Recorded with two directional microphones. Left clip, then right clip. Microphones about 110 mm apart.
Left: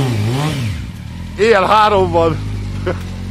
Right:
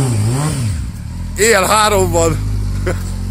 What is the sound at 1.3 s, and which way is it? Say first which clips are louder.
Speech: left 1 dB; 20° right (ahead or behind).